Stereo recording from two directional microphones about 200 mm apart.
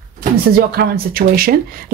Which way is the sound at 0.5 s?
50° right (ahead or behind).